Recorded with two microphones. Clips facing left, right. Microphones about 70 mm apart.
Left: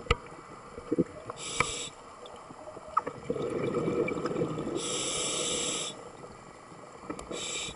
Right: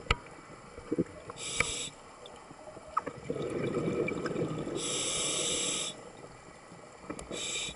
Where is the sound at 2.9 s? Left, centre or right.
Centre.